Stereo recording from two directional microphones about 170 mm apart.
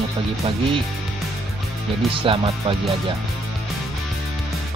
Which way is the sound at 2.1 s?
35° right (ahead or behind).